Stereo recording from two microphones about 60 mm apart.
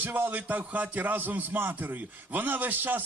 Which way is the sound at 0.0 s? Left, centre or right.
Right.